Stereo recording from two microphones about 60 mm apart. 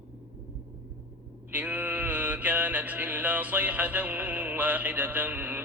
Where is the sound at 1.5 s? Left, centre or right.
Right.